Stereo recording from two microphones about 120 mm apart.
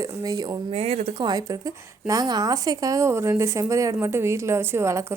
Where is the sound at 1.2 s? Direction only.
35° right (ahead or behind).